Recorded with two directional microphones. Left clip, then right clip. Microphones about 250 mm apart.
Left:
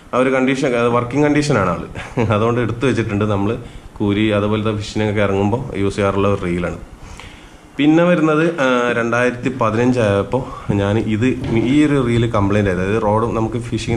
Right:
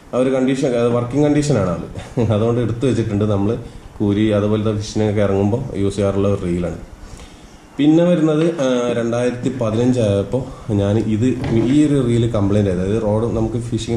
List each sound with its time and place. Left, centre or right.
0.1 s a man's voice: centre
7.7 s a man's voice: centre
10.7 s speech: centre